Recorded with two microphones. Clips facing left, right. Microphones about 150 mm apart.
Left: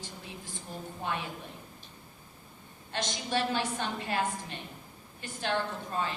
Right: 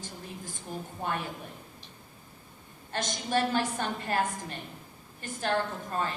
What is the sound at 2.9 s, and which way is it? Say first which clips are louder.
A woman's voice: right 3 dB; 45° right (ahead or behind).